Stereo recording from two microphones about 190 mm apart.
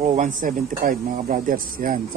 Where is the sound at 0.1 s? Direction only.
40° right (ahead or behind).